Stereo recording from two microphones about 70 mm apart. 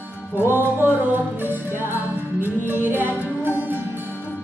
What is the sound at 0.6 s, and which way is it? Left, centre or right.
Music, right.